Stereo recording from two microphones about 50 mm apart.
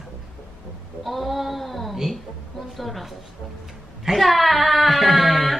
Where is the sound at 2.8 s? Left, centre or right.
Centre.